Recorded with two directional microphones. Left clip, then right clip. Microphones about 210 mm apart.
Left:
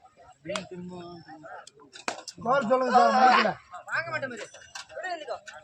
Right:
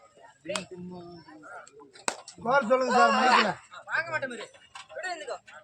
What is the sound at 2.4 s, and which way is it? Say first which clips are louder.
Speech: even; 15° right (ahead or behind).